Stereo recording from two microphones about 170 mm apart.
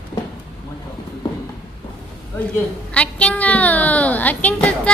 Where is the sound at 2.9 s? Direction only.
5° left (ahead or behind).